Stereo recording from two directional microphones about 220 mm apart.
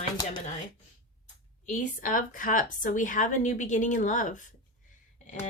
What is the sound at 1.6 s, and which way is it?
A woman's voice, 35° left (ahead or behind).